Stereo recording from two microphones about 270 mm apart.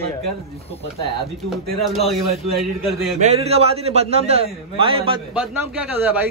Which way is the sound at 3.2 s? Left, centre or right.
Right.